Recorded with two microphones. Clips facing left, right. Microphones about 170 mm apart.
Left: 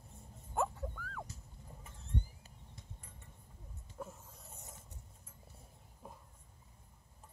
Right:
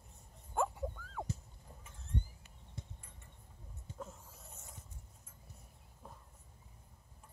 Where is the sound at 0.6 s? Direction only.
Centre (ahead or behind).